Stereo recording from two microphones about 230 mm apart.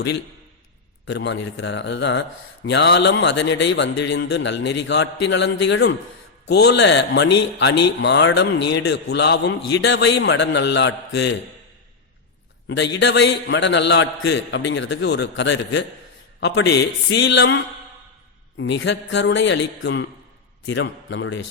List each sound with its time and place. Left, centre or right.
1.0 s a man's voice: left
12.6 s a man's voice: left
17.1 s a man's voice: left